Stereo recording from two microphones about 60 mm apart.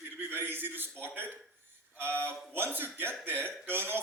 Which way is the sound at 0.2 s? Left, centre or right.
Right.